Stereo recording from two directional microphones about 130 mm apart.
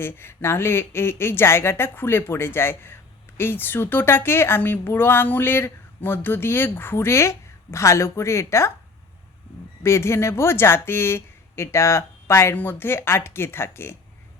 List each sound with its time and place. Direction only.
0.0 s speech: 20° left (ahead or behind)
9.8 s speech: 20° left (ahead or behind)